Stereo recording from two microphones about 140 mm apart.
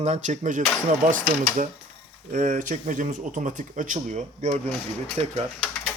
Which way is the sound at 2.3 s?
65° right (ahead or behind).